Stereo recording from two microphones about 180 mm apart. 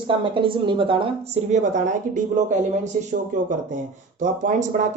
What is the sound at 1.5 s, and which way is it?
Speech, 40° right (ahead or behind).